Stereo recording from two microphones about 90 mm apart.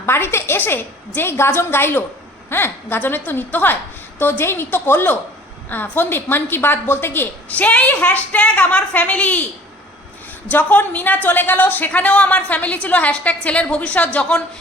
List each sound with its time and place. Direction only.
0.0 s a woman's voice: 25° left (ahead or behind)
10.5 s a woman's voice: 20° left (ahead or behind)